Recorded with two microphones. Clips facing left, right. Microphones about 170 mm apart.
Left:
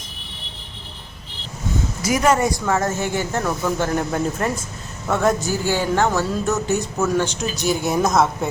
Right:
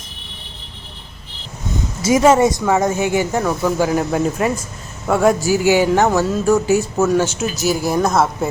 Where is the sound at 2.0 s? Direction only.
25° right (ahead or behind).